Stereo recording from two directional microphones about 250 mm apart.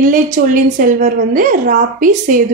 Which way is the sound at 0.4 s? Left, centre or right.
Right.